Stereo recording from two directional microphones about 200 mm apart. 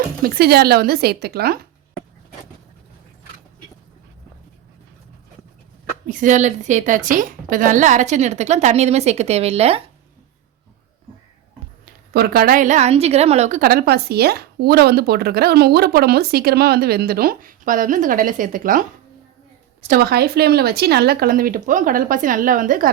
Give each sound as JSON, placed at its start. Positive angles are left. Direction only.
{"t": 0.2, "sound": "speech", "side_deg": -50}
{"t": 6.1, "sound": "a woman's voice", "side_deg": -40}
{"t": 12.1, "sound": "a woman's voice", "side_deg": -50}
{"t": 13.6, "sound": "speech", "side_deg": -50}
{"t": 20.0, "sound": "speech", "side_deg": -50}